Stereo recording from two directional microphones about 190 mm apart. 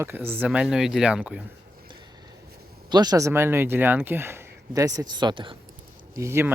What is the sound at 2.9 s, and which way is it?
Speech, 20° right (ahead or behind).